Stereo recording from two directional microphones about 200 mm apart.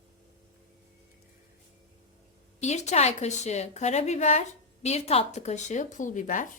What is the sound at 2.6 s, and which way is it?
A woman's voice, 35° left (ahead or behind).